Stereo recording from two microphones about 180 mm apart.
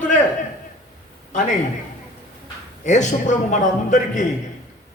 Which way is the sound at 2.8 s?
40° left (ahead or behind).